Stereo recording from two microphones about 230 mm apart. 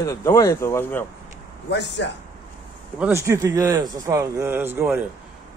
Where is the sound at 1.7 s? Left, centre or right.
Left.